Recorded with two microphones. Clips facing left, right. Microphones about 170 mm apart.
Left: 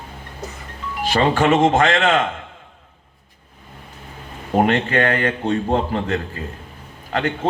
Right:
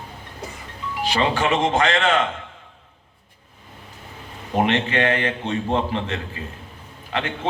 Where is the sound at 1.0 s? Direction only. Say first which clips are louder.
Left 5 dB; 45° left (ahead or behind).